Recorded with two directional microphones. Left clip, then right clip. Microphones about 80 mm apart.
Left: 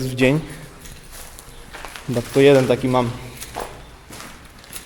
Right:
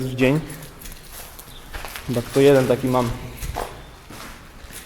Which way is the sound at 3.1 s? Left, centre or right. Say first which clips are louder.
Even; centre.